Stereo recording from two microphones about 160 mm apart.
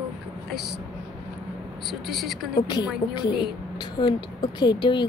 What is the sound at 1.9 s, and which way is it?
Speech, centre (ahead or behind).